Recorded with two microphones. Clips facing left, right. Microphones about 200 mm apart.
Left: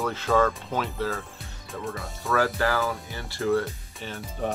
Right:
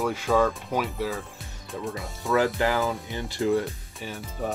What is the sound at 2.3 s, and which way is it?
Speech, 20° right (ahead or behind).